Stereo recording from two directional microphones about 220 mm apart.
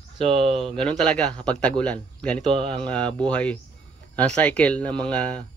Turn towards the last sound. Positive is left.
turn(degrees=5)  # may be behind; listen again after turning